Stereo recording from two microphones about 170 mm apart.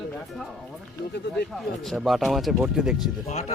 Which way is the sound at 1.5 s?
Centre (ahead or behind).